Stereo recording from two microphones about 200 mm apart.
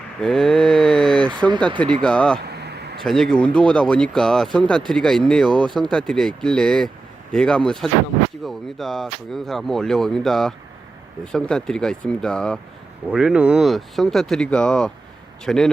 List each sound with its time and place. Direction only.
0.2 s mantra: centre (ahead or behind)
2.0 s speech: 5° left (ahead or behind)
2.4 s vehicle: 50° right (ahead or behind)
3.0 s speech: centre (ahead or behind)